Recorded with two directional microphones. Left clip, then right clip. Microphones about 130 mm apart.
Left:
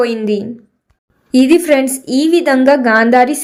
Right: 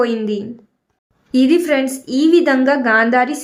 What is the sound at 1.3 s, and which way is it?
A woman's voice, 35° left (ahead or behind).